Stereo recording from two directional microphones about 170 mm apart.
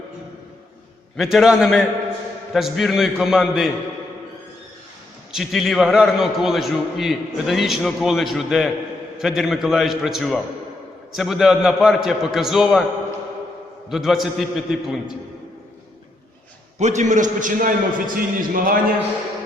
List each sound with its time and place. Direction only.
1.1 s a man's voice: centre (ahead or behind)
5.3 s a man's voice: centre (ahead or behind)
13.9 s a man's voice: centre (ahead or behind)
16.7 s a man's voice: 45° right (ahead or behind)